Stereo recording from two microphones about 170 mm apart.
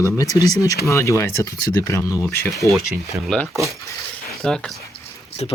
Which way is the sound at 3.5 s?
20° right (ahead or behind).